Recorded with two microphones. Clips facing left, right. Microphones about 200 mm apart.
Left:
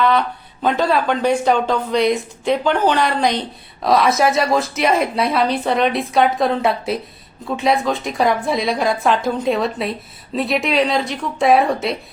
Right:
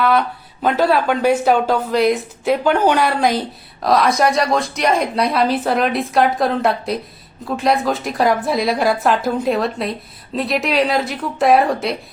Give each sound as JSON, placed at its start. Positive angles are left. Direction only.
{"t": 0.0, "sound": "a woman's voice", "side_deg": -5}